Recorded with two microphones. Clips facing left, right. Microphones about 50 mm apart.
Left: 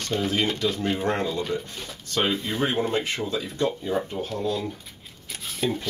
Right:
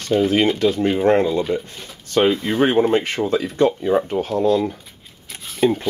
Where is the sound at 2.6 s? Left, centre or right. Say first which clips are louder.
Right 10 dB; right.